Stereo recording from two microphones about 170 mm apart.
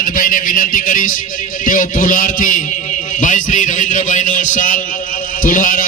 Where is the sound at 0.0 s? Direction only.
55° left (ahead or behind).